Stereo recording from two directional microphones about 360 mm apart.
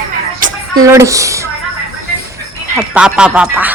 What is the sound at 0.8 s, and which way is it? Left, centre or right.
Speech, centre.